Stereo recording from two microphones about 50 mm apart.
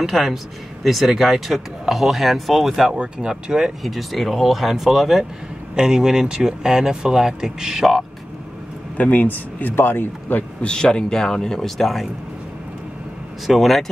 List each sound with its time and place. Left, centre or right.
0.0 s speech: centre
3.8 s speech: centre
8.9 s a man's voice: left
10.6 s speech: centre
13.5 s speech: centre